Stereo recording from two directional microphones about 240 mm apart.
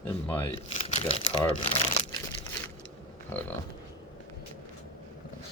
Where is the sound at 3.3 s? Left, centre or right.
Centre.